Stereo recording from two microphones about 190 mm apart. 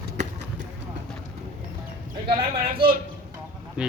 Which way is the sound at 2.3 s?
30° right (ahead or behind).